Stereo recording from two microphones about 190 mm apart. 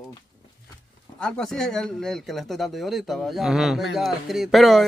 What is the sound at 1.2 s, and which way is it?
Speech, 5° left (ahead or behind).